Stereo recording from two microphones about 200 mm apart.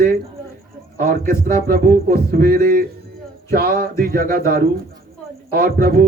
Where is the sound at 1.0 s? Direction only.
45° right (ahead or behind).